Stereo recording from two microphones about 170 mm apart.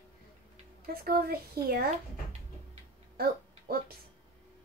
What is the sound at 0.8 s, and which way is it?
Speech, 65° right (ahead or behind).